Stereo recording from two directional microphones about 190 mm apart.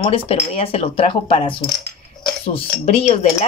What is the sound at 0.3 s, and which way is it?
Speech, 30° left (ahead or behind).